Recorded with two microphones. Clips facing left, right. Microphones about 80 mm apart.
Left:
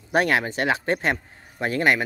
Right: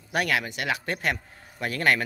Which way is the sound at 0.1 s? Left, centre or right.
Left.